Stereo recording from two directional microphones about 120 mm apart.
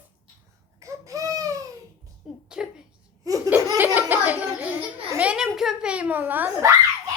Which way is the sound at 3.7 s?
15° right (ahead or behind).